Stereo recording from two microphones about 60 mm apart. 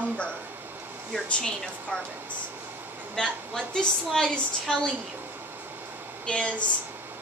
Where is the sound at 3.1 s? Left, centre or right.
Centre.